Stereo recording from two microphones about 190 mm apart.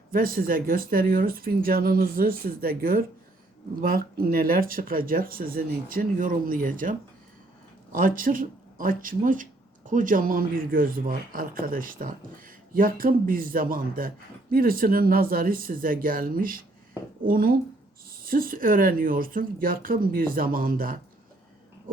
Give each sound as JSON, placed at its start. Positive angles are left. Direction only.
{"t": 0.1, "sound": "speech", "side_deg": -50}
{"t": 7.9, "sound": "speech", "side_deg": -45}